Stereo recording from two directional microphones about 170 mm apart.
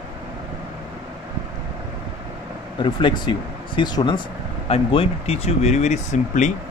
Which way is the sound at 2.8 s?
25° left (ahead or behind).